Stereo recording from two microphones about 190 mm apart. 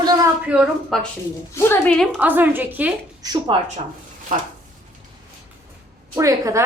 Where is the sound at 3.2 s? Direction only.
20° right (ahead or behind).